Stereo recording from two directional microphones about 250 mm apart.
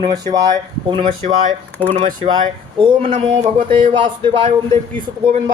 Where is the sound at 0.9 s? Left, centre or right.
Right.